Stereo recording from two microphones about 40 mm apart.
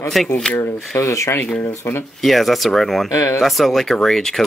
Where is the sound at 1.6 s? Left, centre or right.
Left.